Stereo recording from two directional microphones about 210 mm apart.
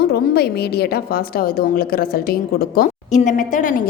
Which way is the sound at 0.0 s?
50° left (ahead or behind).